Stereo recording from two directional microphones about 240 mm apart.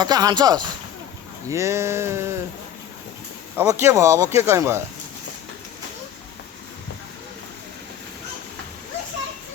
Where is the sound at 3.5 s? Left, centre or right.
Centre.